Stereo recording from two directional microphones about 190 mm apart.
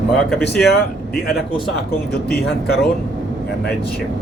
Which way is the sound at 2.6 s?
55° left (ahead or behind).